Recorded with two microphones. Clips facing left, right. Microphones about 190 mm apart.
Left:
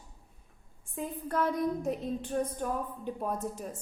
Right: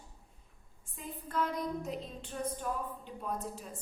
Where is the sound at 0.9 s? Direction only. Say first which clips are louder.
Left 5 dB; 50° left (ahead or behind).